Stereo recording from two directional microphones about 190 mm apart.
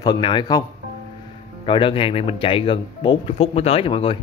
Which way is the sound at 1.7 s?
25° left (ahead or behind).